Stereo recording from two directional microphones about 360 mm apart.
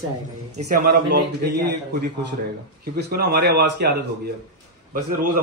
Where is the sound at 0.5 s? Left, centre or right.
Right.